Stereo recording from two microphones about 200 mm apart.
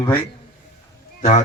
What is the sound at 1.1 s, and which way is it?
Speech, 35° left (ahead or behind).